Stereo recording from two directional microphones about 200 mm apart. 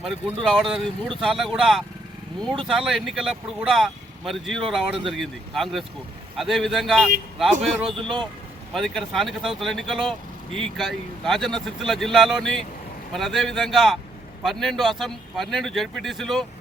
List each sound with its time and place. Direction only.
0.4 s speech: centre (ahead or behind)
7.9 s speech: 25° right (ahead or behind)
8.7 s speech: centre (ahead or behind)